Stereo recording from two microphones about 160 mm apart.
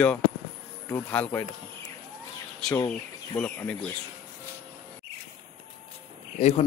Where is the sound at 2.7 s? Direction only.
20° left (ahead or behind).